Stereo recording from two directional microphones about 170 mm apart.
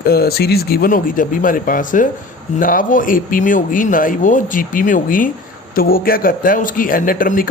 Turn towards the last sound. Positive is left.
turn(degrees=55)  # may be behind; listen again after turning